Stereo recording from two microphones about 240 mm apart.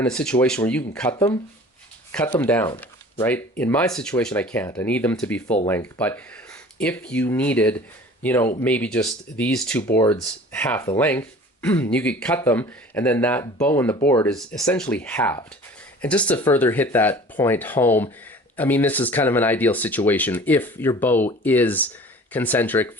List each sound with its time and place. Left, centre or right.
0.0 s speech: centre
1.1 s speech: centre
2.1 s speech: centre